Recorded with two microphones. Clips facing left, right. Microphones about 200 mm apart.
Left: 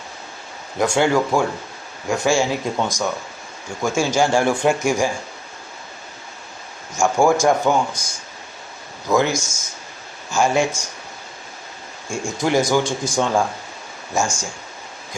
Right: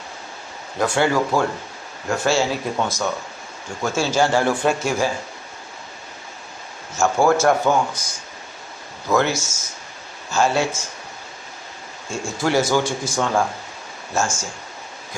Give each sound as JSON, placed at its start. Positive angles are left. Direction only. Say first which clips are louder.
{"t": 0.8, "sound": "speech", "louder": "left 2 dB", "side_deg": 15}
{"t": 6.9, "sound": "speech", "louder": "left 1 dB", "side_deg": 10}
{"t": 9.1, "sound": "speech", "louder": "left 1 dB", "side_deg": 15}
{"t": 12.0, "sound": "speech", "louder": "left 1 dB", "side_deg": 15}